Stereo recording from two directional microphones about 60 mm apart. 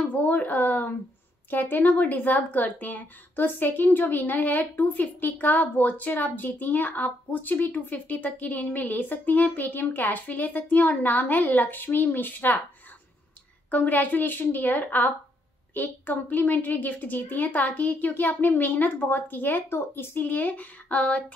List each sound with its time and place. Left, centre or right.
0.0 s speech: left
13.7 s speech: left